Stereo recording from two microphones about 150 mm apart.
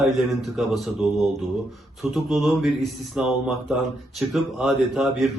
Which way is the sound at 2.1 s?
Centre (ahead or behind).